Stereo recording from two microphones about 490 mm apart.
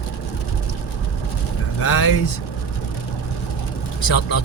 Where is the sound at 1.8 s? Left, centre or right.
Left.